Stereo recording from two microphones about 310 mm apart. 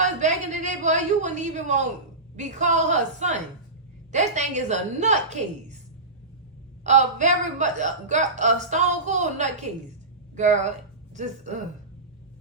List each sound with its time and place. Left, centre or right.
0.0 s a sound: right
2.3 s speech: right
6.8 s a woman's voice: right